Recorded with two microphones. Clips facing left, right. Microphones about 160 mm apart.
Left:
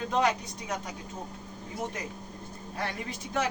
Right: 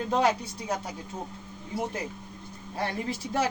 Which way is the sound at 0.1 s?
30° right (ahead or behind).